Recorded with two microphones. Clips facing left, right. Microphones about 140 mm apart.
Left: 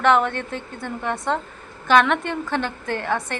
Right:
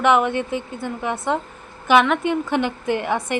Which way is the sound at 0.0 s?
10° right (ahead or behind).